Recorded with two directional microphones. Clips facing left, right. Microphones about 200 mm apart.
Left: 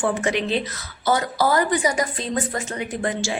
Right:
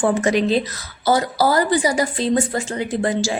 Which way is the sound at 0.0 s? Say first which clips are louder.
Right 5 dB; 40° right (ahead or behind).